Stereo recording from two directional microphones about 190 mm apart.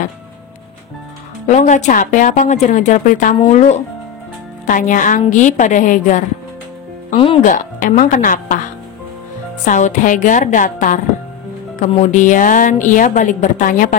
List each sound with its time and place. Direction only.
1.5 s a woman's voice: 40° left (ahead or behind)
7.4 s a woman's voice: 45° left (ahead or behind)
9.7 s a woman's voice: 40° left (ahead or behind)